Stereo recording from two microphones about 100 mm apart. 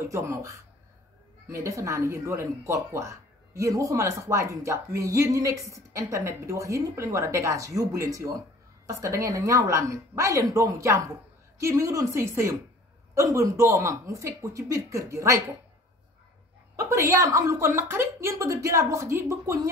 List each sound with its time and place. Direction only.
0.1 s speech: 30° right (ahead or behind)
16.7 s speech: 30° right (ahead or behind)